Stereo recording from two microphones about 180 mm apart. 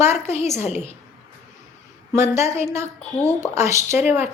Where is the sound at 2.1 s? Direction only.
15° right (ahead or behind).